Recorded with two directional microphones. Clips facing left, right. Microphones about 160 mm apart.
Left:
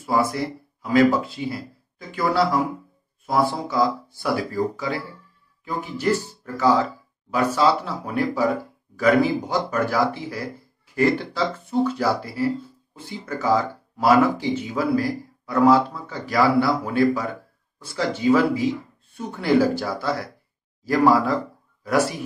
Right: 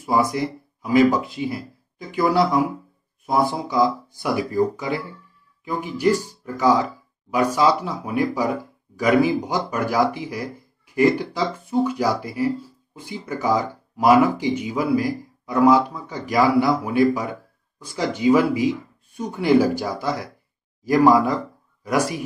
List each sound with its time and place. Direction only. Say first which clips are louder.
0.0 s speech: right 2 dB; 15° right (ahead or behind)